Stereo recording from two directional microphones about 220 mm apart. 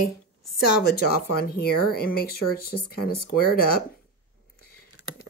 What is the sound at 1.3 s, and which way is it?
Speech, 45° left (ahead or behind).